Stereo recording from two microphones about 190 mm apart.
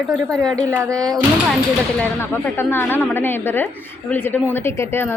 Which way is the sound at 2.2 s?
10° left (ahead or behind).